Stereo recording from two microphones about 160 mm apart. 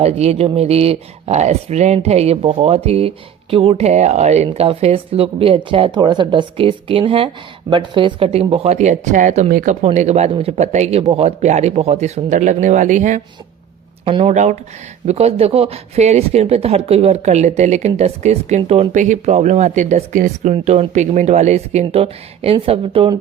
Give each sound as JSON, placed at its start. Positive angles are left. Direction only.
{"t": 0.0, "sound": "speech", "side_deg": -40}
{"t": 9.5, "sound": "speech", "side_deg": -60}
{"t": 9.8, "sound": "speech", "side_deg": -45}
{"t": 14.0, "sound": "speech", "side_deg": -35}